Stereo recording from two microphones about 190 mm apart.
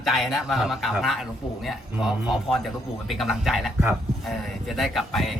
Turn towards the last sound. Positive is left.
turn(degrees=0)  # may be behind; listen again after turning